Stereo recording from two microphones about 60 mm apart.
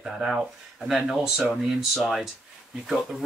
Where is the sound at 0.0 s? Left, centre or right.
Centre.